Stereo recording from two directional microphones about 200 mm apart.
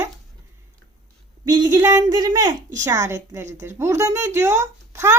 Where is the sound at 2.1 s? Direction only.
20° right (ahead or behind).